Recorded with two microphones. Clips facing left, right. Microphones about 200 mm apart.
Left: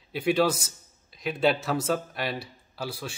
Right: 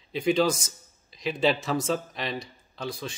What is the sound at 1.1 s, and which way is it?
Speech, 5° left (ahead or behind).